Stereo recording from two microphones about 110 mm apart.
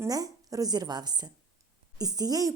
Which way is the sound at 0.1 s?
35° right (ahead or behind).